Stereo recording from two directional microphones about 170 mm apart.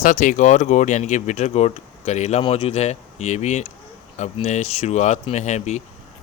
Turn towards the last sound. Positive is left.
turn(degrees=45)  # may be behind; listen again after turning